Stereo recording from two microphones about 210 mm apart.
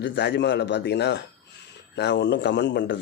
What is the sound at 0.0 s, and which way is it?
A man's voice, 55° left (ahead or behind).